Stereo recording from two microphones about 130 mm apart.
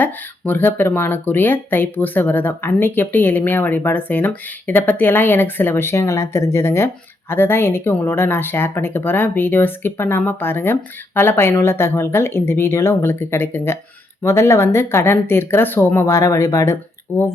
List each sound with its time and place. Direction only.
0.0 s speech: 15° left (ahead or behind)